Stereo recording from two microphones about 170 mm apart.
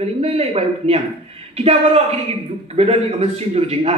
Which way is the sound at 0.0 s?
40° right (ahead or behind).